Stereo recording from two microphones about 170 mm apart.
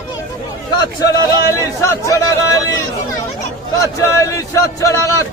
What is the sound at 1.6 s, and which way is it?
Speech, 20° left (ahead or behind).